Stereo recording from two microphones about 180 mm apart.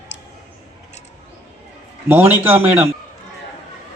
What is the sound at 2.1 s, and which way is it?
Speech, 10° right (ahead or behind).